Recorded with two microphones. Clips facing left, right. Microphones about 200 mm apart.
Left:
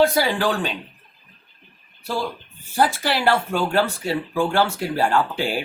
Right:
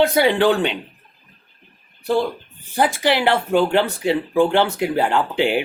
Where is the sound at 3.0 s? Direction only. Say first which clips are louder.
Right 3 dB; 15° right (ahead or behind).